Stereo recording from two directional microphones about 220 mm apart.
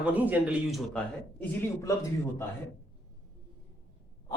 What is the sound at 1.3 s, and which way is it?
Speech, 10° left (ahead or behind).